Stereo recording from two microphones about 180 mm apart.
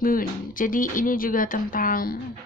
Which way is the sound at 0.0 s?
50° left (ahead or behind).